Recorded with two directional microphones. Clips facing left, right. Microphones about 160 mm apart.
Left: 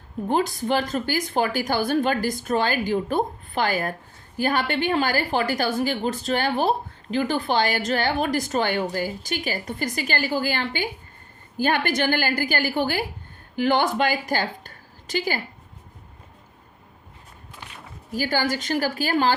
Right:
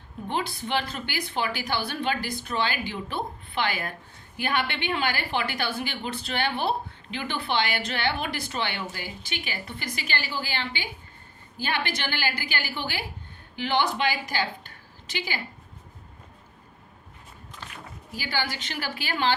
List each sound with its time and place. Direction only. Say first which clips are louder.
0.3 s a woman's voice: left 7 dB; 40° left (ahead or behind)
18.1 s speech: left 7 dB; 45° left (ahead or behind)